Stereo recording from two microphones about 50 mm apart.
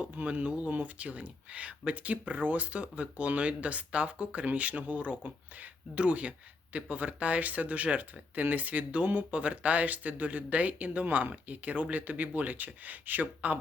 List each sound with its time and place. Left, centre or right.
0.0 s speech: right